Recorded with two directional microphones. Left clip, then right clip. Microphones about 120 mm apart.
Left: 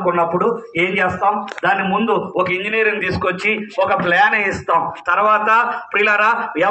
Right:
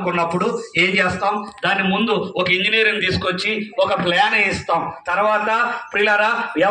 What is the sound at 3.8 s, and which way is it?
Speech, 35° right (ahead or behind).